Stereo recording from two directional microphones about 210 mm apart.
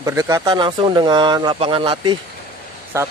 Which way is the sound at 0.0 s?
15° right (ahead or behind).